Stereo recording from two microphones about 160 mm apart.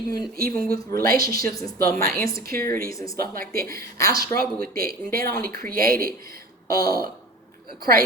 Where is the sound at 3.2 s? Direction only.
65° right (ahead or behind).